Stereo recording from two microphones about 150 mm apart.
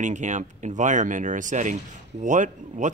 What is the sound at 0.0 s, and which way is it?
Speech, 55° right (ahead or behind).